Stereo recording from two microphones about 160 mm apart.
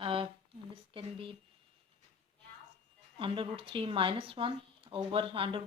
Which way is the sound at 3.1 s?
35° right (ahead or behind).